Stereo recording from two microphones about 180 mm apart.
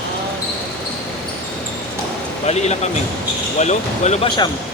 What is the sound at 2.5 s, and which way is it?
Speech, 40° left (ahead or behind).